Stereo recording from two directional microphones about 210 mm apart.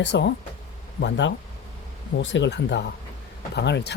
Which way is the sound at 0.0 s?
55° left (ahead or behind).